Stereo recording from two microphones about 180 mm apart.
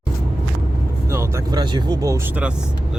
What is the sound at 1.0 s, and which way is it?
Speech, 15° right (ahead or behind).